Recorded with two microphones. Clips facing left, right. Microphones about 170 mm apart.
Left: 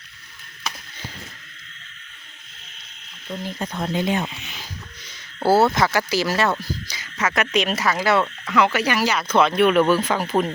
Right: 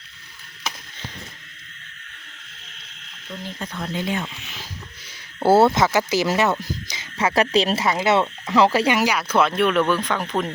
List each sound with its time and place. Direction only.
3.6 s speech: 35° left (ahead or behind)
3.9 s speech: 20° left (ahead or behind)
4.3 s a sound: centre (ahead or behind)
5.4 s speech: 25° right (ahead or behind)
9.0 s speech: 10° right (ahead or behind)